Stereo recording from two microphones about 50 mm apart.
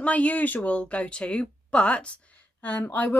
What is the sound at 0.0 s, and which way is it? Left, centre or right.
Speech, left.